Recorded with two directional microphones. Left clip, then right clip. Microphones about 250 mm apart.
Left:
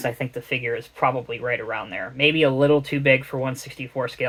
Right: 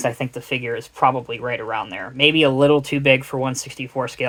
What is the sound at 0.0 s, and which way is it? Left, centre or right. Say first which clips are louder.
Speech: right 3 dB; right.